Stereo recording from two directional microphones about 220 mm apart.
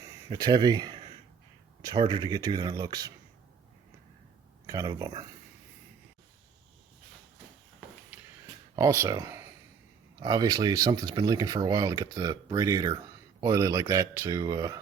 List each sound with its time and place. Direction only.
0.0 s speech: 20° right (ahead or behind)
4.6 s speech: 15° right (ahead or behind)
8.1 s a sound: 5° right (ahead or behind)
8.7 s speech: 15° right (ahead or behind)